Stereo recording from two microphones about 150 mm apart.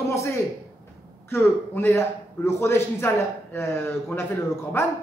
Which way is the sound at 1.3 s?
15° left (ahead or behind).